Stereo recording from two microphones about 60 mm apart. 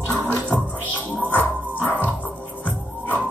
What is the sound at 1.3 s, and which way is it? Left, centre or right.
Music, left.